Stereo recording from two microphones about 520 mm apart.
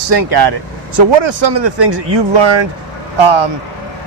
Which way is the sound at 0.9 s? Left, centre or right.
Right.